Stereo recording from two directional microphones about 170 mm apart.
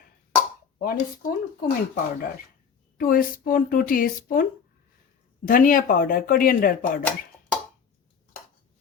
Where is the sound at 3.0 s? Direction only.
55° left (ahead or behind).